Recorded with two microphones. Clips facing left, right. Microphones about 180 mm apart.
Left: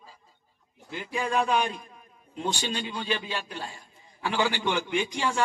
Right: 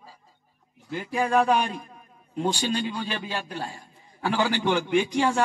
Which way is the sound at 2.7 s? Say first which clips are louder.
Right 2 dB; 45° right (ahead or behind).